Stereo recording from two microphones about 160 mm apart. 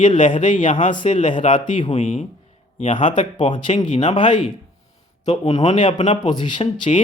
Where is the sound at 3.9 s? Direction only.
50° left (ahead or behind).